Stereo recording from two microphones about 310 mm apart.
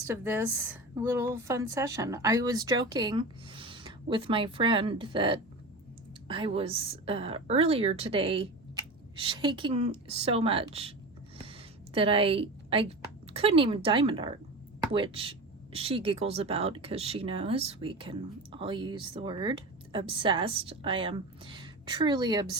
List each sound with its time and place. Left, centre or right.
0.1 s speech: centre
11.9 s speech: centre